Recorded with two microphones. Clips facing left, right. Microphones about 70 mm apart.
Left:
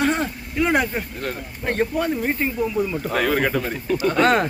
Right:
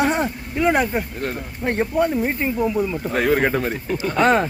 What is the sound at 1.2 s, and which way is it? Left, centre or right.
Speech, right.